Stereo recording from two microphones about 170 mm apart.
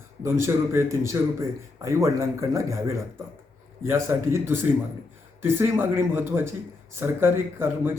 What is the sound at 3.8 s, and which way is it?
A man's voice, 15° right (ahead or behind).